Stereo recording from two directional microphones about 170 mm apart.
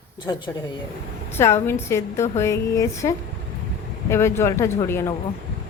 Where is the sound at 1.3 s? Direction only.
15° left (ahead or behind).